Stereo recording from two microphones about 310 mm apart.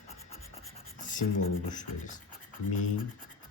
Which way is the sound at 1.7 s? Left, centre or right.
Left.